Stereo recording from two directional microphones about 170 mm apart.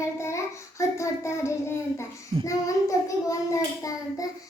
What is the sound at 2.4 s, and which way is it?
A child's voice, 20° left (ahead or behind).